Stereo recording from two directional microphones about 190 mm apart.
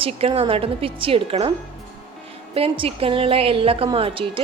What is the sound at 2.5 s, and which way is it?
A woman's voice, 30° right (ahead or behind).